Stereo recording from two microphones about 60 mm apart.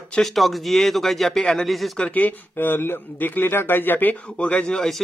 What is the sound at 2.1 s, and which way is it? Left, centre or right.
A man's voice, left.